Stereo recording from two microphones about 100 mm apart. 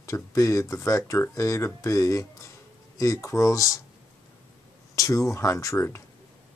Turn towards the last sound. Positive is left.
turn(degrees=25)  # may be behind; listen again after turning